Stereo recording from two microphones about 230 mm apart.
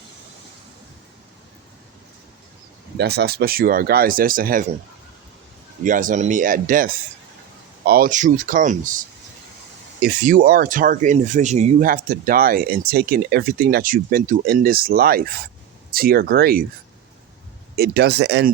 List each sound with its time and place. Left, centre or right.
3.0 s speech: right
5.8 s speech: right
10.0 s speech: right
17.7 s speech: right